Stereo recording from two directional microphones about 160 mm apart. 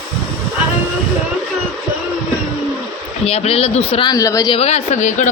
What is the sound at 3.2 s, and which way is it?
Speech, 40° left (ahead or behind).